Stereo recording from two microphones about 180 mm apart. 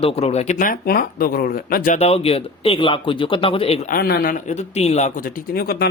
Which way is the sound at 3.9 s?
60° left (ahead or behind).